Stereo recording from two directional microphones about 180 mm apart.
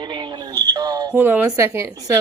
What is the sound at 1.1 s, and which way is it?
Speech, 10° right (ahead or behind).